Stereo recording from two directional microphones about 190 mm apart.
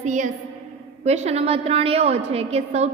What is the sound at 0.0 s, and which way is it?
A woman's voice, 40° right (ahead or behind).